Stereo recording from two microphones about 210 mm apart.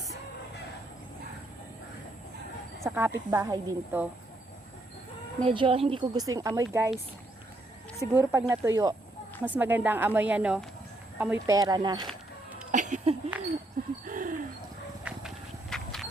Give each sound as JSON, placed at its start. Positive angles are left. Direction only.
{"t": 2.8, "sound": "speech", "side_deg": -10}
{"t": 5.4, "sound": "speech", "side_deg": -25}
{"t": 8.1, "sound": "speech", "side_deg": -15}
{"t": 12.7, "sound": "a sound", "side_deg": -35}
{"t": 15.1, "sound": "horse", "side_deg": -5}
{"t": 15.7, "sound": "a sound", "side_deg": 0}